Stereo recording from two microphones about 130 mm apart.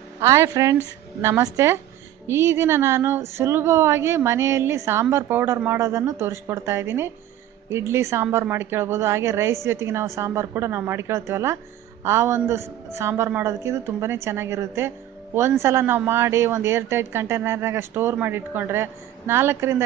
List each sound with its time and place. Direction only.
0.2 s a woman's voice: 25° right (ahead or behind)